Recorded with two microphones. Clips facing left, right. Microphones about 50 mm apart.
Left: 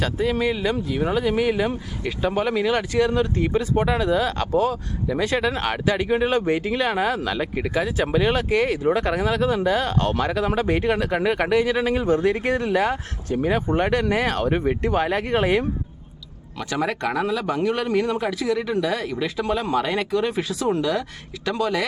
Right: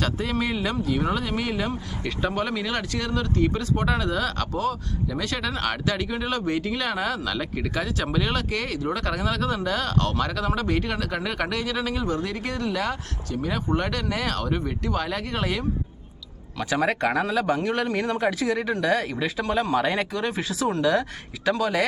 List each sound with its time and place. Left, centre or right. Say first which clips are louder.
0.0 s speech: left 4 dB; centre; by 15.6 s left
16.6 s speech: right 1 dB; centre
17.3 s speech: left 1 dB; centre